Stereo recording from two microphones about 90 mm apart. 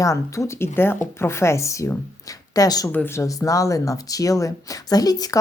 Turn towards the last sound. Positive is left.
turn(degrees=45)  # may be behind; listen again after turning